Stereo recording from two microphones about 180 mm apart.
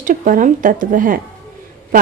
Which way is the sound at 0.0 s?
45° right (ahead or behind).